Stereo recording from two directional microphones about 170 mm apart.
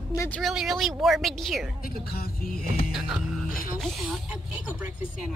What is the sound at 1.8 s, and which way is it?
Speech, 60° left (ahead or behind).